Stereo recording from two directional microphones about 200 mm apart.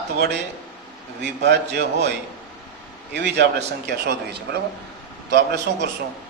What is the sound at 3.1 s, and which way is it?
Speech, 55° right (ahead or behind).